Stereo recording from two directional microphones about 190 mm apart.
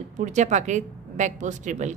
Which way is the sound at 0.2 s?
40° right (ahead or behind).